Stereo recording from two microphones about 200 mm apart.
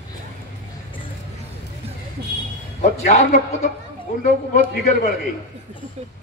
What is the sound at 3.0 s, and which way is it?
A man's voice, 35° left (ahead or behind).